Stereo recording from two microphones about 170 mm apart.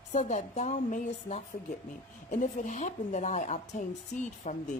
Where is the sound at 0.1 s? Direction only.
45° left (ahead or behind).